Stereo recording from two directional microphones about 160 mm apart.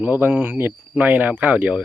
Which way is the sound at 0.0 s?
10° right (ahead or behind).